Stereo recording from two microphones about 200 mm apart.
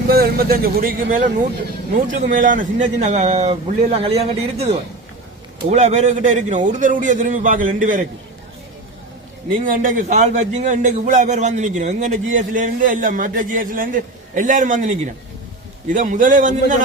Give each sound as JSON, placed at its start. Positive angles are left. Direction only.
{"t": 0.1, "sound": "speech", "side_deg": -50}
{"t": 2.0, "sound": "a man's voice", "side_deg": -45}
{"t": 9.6, "sound": "a man's voice", "side_deg": -40}